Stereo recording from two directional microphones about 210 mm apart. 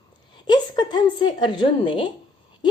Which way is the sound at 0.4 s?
20° left (ahead or behind).